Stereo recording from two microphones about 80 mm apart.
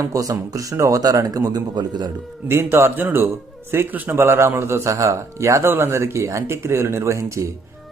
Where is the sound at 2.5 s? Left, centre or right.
Right.